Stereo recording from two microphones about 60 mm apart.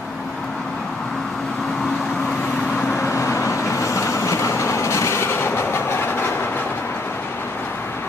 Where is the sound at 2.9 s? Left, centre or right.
Left.